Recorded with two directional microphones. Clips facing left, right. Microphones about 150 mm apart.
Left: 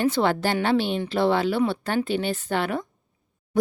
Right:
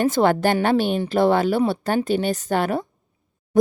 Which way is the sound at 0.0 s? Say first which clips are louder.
Right 4 dB; 45° right (ahead or behind).